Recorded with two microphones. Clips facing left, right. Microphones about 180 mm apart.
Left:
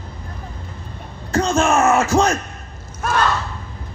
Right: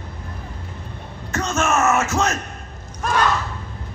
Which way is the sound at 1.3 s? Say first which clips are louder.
Left 5 dB; 30° left (ahead or behind).